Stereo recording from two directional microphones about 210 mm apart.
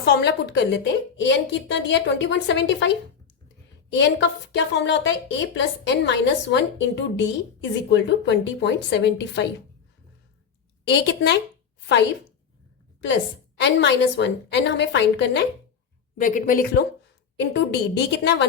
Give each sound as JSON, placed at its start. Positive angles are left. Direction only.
{"t": 0.0, "sound": "a woman's voice", "side_deg": 55}
{"t": 10.9, "sound": "a woman's voice", "side_deg": 55}
{"t": 13.6, "sound": "a woman's voice", "side_deg": 55}
{"t": 16.1, "sound": "speech", "side_deg": 40}
{"t": 17.4, "sound": "a woman's voice", "side_deg": 55}